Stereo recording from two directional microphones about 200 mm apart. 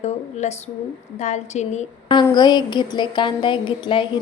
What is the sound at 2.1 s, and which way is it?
A woman's voice, 20° left (ahead or behind).